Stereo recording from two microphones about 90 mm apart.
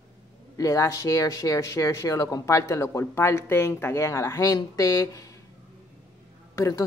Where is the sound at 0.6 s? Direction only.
35° left (ahead or behind).